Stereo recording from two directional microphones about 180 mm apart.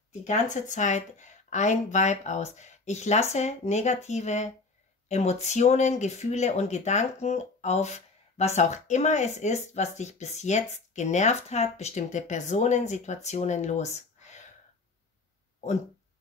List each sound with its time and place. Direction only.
0.2 s speech: 40° left (ahead or behind)